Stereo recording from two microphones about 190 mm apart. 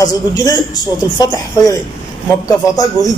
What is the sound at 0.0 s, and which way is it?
A man's voice, 20° left (ahead or behind).